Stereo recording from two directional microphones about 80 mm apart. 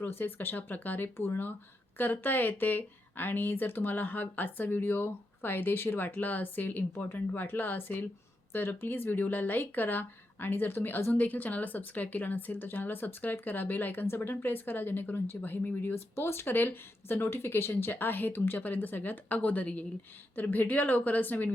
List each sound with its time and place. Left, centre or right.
0.0 s speech: left